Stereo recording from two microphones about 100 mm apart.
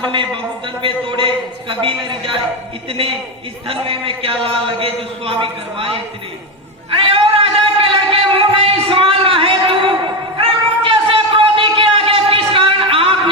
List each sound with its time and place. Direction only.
0.0 s speech: 55° right (ahead or behind)
3.7 s speech: 65° right (ahead or behind)
6.9 s a sound: 65° right (ahead or behind)